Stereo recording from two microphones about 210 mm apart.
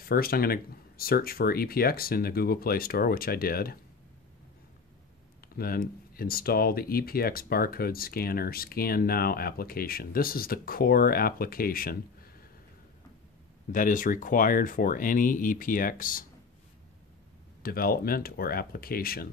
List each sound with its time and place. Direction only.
0.0 s speech: 45° left (ahead or behind)
5.6 s speech: 45° left (ahead or behind)
13.7 s speech: 40° left (ahead or behind)
17.6 s speech: 45° left (ahead or behind)